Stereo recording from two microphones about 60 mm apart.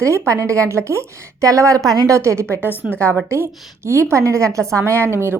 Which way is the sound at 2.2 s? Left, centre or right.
Right.